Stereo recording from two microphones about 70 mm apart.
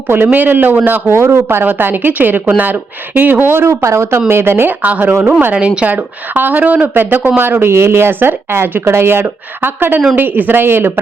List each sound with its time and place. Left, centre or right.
0.3 s speech: right
4.8 s speech: right
5.9 s speech: right